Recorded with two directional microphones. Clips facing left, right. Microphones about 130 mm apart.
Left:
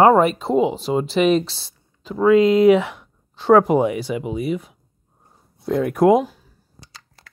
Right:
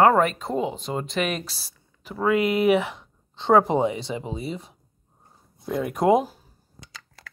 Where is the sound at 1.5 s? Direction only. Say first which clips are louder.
Left 2 dB; 25° left (ahead or behind).